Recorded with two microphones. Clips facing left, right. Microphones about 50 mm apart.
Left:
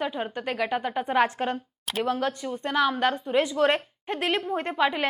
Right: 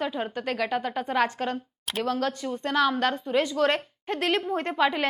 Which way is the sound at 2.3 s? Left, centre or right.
Centre.